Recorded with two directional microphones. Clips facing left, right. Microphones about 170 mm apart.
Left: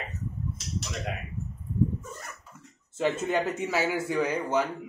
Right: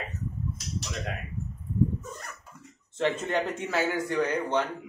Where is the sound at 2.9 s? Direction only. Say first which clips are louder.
Left 1 dB; 10° left (ahead or behind).